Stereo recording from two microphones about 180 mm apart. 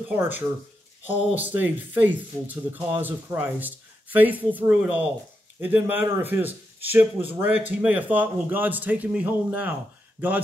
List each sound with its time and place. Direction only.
0.1 s a man's voice: 10° right (ahead or behind)